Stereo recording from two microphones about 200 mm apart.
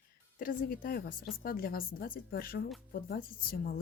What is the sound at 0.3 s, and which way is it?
Speech, 45° left (ahead or behind).